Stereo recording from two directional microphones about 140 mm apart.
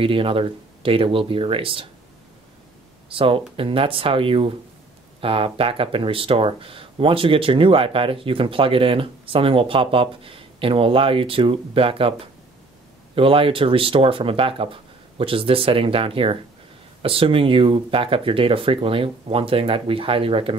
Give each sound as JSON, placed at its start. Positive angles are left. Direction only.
{"t": 0.0, "sound": "speech", "side_deg": -40}
{"t": 3.1, "sound": "speech", "side_deg": -40}